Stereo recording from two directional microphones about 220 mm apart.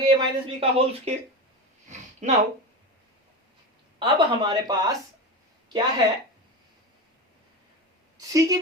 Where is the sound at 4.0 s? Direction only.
20° right (ahead or behind).